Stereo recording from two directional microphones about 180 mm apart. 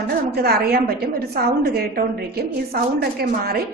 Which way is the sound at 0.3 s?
60° right (ahead or behind).